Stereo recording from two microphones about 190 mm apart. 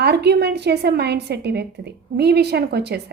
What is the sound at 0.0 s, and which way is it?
A woman's voice, 60° right (ahead or behind).